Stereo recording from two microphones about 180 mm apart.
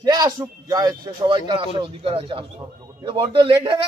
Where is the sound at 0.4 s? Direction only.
20° right (ahead or behind).